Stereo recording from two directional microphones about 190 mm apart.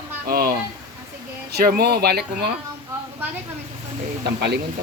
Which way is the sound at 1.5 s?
55° right (ahead or behind).